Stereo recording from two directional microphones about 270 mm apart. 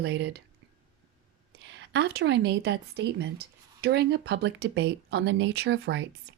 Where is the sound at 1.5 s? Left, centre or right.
Right.